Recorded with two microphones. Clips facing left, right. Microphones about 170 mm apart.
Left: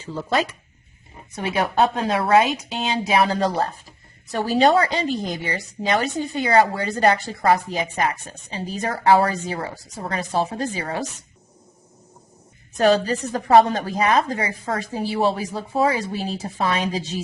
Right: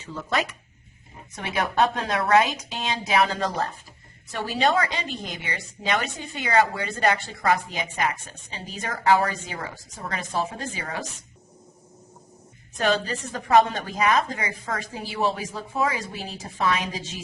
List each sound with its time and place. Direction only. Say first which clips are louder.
0.0 s a woman's voice: left 4 dB; 30° left (ahead or behind)
12.7 s a woman's voice: left 7 dB; 35° left (ahead or behind)